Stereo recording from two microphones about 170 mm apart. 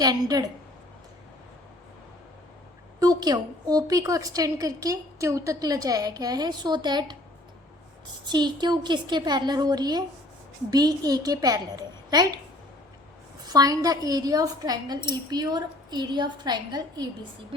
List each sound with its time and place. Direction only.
0.0 s a woman's voice: 20° right (ahead or behind)
3.0 s a woman's voice: 25° right (ahead or behind)
8.3 s a woman's voice: 25° right (ahead or behind)
13.4 s a woman's voice: 20° right (ahead or behind)